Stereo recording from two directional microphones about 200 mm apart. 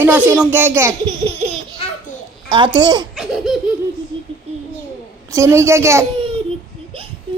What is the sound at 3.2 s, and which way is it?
Laughter, 5° right (ahead or behind).